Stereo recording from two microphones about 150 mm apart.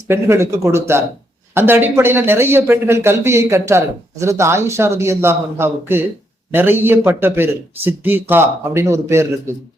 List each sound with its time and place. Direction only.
0.1 s speech: 20° right (ahead or behind)